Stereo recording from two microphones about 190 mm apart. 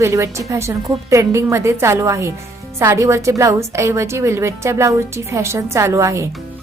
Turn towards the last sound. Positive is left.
turn(degrees=-15)  # may be behind; listen again after turning